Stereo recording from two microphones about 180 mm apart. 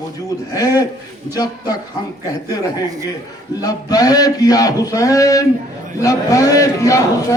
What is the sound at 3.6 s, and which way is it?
A man's voice, 20° left (ahead or behind).